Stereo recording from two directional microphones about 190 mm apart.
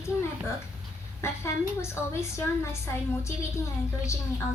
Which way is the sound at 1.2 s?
15° left (ahead or behind).